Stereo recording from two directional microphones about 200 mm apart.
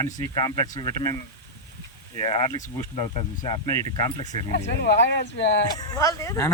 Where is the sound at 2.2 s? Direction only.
25° left (ahead or behind).